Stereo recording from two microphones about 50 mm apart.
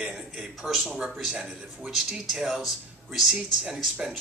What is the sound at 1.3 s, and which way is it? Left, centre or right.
Speech, centre.